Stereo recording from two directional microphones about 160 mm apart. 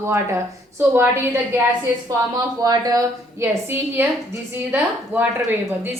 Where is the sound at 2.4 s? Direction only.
25° right (ahead or behind).